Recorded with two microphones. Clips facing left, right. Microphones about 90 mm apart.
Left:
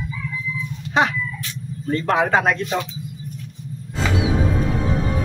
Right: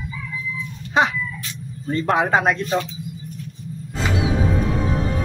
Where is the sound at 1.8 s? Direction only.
5° right (ahead or behind).